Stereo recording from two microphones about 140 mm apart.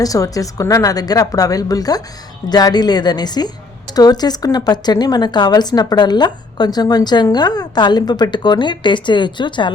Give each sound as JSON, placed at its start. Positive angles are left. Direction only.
{"t": 0.0, "sound": "speech", "side_deg": 25}